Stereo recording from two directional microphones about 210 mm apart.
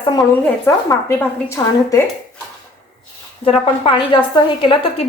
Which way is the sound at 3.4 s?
25° left (ahead or behind).